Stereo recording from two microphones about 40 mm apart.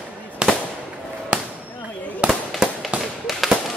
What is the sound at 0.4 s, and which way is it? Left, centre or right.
Fireworks, right.